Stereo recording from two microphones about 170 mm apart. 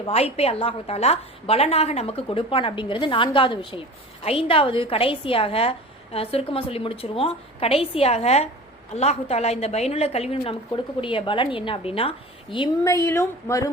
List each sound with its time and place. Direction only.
0.0 s a woman's voice: 35° left (ahead or behind)
12.8 s speech: 15° left (ahead or behind)